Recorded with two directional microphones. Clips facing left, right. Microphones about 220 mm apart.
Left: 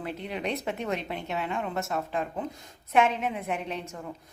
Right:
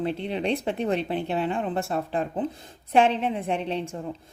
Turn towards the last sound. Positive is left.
turn(degrees=-30)  # may be behind; listen again after turning